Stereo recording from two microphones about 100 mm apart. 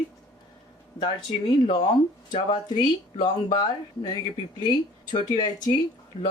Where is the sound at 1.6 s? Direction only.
45° left (ahead or behind).